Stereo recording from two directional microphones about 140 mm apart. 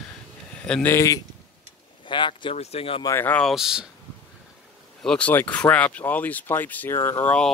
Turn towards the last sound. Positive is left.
turn(degrees=10)  # may be behind; listen again after turning